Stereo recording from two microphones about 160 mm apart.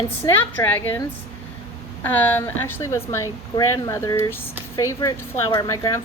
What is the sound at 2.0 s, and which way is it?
A woman's voice, 10° left (ahead or behind).